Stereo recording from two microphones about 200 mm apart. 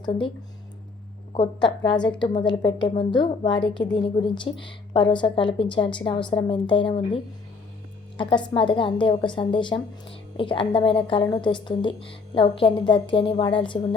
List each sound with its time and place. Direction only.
1.3 s a woman's voice: 25° left (ahead or behind)
8.2 s a woman's voice: 25° left (ahead or behind)